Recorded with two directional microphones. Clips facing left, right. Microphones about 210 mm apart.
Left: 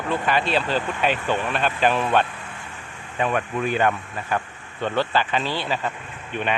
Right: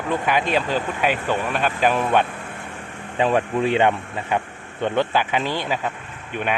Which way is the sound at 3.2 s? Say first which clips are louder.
Right 4 dB; 30° right (ahead or behind).